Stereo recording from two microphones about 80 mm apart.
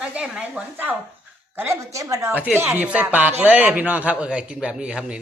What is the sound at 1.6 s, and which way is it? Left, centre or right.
Speech, right.